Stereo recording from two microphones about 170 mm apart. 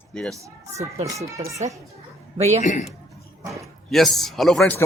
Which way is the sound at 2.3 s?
40° right (ahead or behind).